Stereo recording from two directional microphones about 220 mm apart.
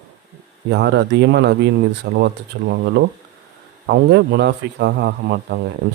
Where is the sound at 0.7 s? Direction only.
50° right (ahead or behind).